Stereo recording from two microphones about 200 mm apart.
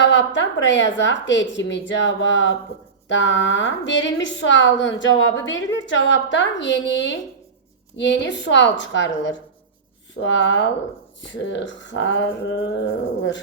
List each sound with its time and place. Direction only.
0.0 s a woman's voice: 65° left (ahead or behind)